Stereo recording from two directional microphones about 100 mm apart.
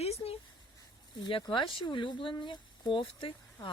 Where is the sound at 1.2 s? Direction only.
55° left (ahead or behind).